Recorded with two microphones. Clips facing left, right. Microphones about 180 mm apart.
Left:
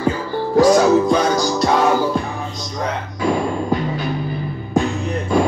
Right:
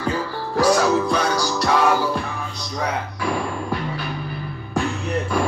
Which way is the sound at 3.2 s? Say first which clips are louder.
Left 10 dB; 20° left (ahead or behind).